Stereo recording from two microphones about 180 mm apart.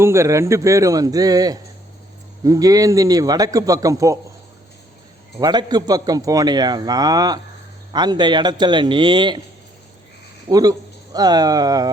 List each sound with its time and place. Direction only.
0.0 s a man's voice: 15° right (ahead or behind)
5.4 s a man's voice: 25° right (ahead or behind)
10.5 s speech: 20° right (ahead or behind)